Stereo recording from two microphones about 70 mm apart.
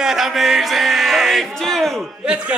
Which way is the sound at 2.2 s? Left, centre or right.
Centre.